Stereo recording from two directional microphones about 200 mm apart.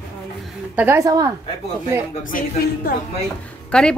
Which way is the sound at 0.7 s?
10° right (ahead or behind).